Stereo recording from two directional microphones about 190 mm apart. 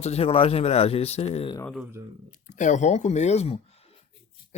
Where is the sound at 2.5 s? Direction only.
40° left (ahead or behind).